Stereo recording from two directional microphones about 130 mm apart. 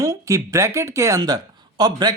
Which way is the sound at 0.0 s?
25° right (ahead or behind).